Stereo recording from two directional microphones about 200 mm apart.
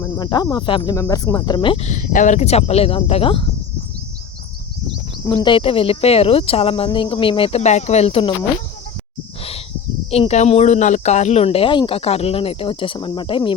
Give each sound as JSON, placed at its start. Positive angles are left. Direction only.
{"t": 0.0, "sound": "speech", "side_deg": 20}
{"t": 5.2, "sound": "speech", "side_deg": 20}
{"t": 10.1, "sound": "speech", "side_deg": 30}